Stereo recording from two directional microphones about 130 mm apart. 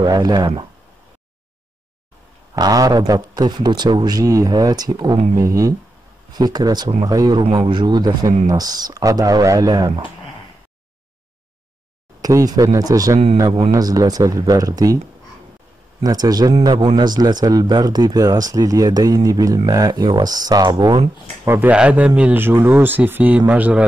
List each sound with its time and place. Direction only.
0.0 s speech: 30° right (ahead or behind)
2.5 s speech: 30° right (ahead or behind)
12.2 s speech: 25° right (ahead or behind)
16.0 s speech: 30° right (ahead or behind)
21.5 s speech: 10° right (ahead or behind)